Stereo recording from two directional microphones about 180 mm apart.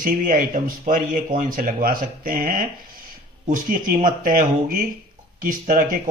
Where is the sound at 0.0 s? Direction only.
50° right (ahead or behind).